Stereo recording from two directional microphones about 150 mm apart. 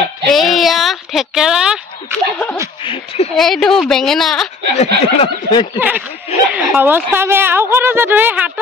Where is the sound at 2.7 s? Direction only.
35° left (ahead or behind).